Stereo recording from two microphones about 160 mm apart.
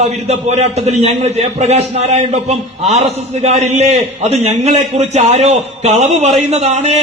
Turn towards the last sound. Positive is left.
turn(degrees=-45)  # may be behind; listen again after turning